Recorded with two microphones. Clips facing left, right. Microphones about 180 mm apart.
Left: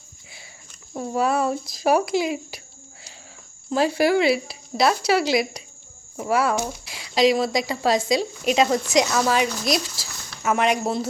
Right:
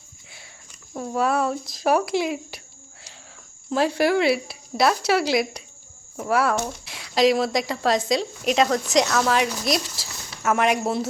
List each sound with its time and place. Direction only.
0.9 s a woman's voice: 5° left (ahead or behind)
3.7 s a woman's voice: centre (ahead or behind)